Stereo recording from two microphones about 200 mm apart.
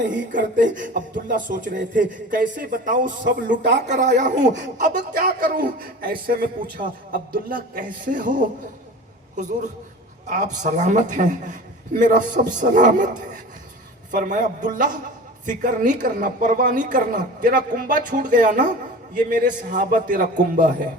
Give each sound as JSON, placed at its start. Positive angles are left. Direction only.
{"t": 0.3, "sound": "a woman's voice", "side_deg": -40}
{"t": 10.2, "sound": "a woman's voice", "side_deg": -40}